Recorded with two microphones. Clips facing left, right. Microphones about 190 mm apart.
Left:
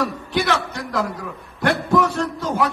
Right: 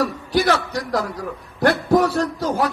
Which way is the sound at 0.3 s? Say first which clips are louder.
Right 4 dB; 40° right (ahead or behind).